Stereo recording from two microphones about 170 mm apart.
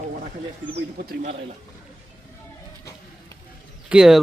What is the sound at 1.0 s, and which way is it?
Speech, 75° right (ahead or behind).